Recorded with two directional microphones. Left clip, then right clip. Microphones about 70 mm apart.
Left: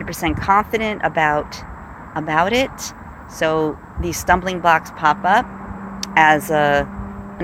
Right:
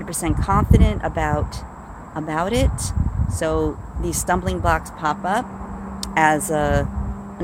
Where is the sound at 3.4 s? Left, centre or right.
Right.